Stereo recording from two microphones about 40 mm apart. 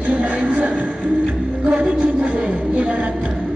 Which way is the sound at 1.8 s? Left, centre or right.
Right.